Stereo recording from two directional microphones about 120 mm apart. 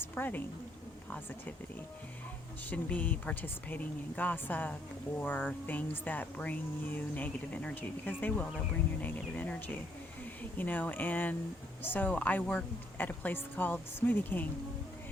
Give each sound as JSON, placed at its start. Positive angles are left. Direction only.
{"t": 0.0, "sound": "a woman's voice", "side_deg": 15}
{"t": 2.6, "sound": "speech", "side_deg": 10}